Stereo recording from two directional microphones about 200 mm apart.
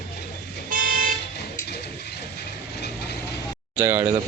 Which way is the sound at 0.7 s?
45° right (ahead or behind).